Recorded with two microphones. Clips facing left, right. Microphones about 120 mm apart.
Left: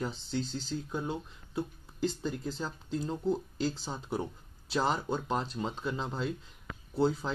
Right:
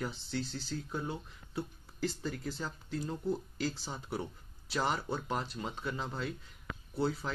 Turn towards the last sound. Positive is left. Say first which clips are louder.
# left 5 dB
turn(degrees=25)  # may be behind; listen again after turning